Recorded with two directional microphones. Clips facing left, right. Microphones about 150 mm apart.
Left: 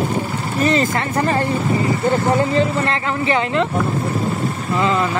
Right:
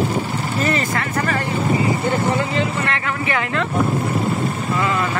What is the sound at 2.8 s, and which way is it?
Speech, 25° left (ahead or behind).